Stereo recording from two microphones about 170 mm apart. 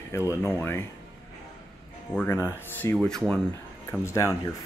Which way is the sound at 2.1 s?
10° left (ahead or behind).